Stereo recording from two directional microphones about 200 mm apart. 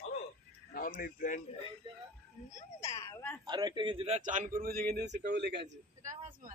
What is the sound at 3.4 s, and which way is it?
Speech, 20° right (ahead or behind).